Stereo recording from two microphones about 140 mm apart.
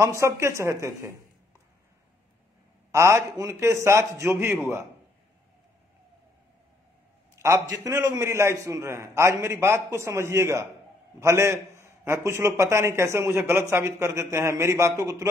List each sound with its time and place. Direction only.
0.0 s a man's voice: 20° right (ahead or behind)
2.9 s a man's voice: 20° right (ahead or behind)
7.3 s a man's voice: 20° right (ahead or behind)